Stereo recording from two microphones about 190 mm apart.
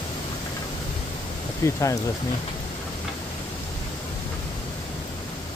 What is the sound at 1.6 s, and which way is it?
Speech, 15° left (ahead or behind).